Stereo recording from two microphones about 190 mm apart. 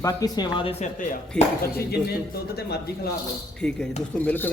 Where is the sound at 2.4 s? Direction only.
55° left (ahead or behind).